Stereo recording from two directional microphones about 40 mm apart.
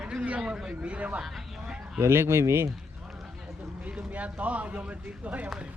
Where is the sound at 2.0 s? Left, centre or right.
Right.